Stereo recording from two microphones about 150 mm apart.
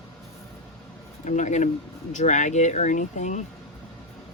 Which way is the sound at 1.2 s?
55° left (ahead or behind).